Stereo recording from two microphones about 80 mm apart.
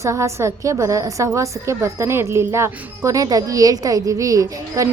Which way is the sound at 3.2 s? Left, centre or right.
Right.